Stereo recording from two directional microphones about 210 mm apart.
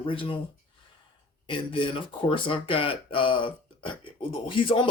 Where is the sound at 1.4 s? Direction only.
25° left (ahead or behind).